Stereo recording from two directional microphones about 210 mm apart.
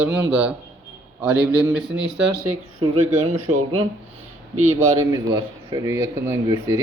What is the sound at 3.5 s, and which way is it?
Speech, 30° right (ahead or behind).